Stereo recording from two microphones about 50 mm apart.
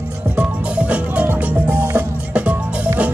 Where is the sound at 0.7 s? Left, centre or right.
Right.